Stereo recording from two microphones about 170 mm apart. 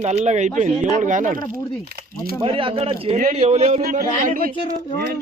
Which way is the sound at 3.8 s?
60° right (ahead or behind).